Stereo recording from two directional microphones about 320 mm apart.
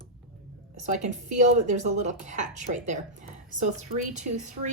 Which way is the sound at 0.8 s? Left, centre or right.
Right.